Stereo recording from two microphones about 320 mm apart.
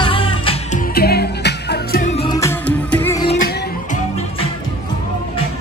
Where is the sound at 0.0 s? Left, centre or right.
Centre.